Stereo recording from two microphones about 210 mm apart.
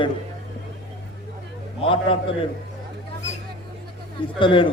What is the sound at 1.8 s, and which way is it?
Speech, 25° left (ahead or behind).